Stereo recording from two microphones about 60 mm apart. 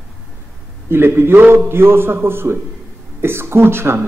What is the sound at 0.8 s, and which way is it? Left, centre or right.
Speech, right.